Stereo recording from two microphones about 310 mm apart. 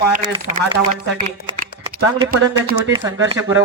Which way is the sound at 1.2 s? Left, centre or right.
Right.